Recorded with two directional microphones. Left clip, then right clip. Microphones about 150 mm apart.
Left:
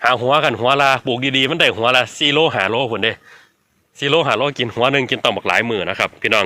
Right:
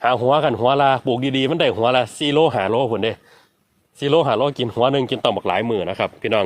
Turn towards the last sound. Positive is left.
turn(degrees=-15)  # may be behind; listen again after turning